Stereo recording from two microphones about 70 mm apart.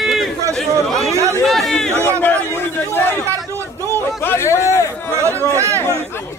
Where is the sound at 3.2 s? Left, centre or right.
Right.